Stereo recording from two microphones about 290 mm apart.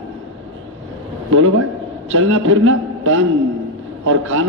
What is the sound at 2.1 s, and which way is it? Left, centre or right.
A man's voice, right.